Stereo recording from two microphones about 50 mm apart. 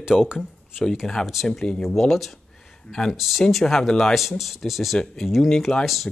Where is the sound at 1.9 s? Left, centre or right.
Centre.